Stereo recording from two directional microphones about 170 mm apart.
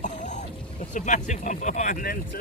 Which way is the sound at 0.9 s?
45° left (ahead or behind).